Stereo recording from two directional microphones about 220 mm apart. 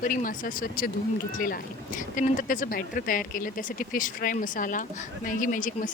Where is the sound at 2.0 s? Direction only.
35° left (ahead or behind).